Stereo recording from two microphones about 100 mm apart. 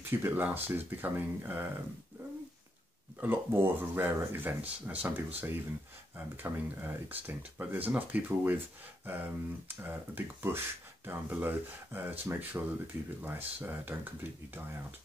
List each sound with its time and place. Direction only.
0.1 s speech: 20° right (ahead or behind)
3.2 s speech: 20° right (ahead or behind)